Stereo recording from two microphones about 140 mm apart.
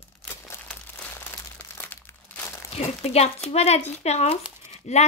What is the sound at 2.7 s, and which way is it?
Speech, 50° left (ahead or behind).